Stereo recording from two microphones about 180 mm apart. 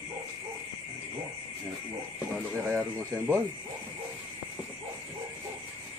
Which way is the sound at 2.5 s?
10° right (ahead or behind).